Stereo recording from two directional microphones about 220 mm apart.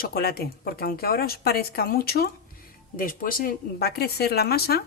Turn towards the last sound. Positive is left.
turn(degrees=45)  # may be behind; listen again after turning